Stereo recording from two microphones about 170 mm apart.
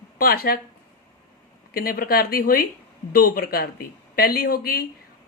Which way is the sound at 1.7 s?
60° left (ahead or behind).